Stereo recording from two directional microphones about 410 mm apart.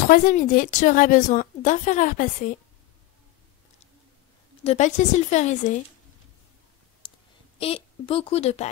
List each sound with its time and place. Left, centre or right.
0.0 s a woman's voice: centre
4.6 s a woman's voice: centre
7.0 s clicking: centre
7.6 s a woman's voice: centre